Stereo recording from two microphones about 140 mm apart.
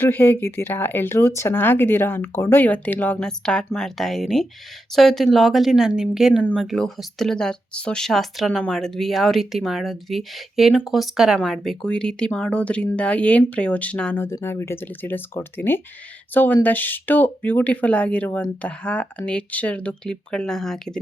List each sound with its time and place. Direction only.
0.0 s speech: 15° left (ahead or behind)